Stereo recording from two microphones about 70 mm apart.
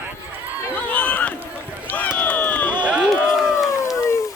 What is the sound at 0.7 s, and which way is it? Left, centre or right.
Run, left.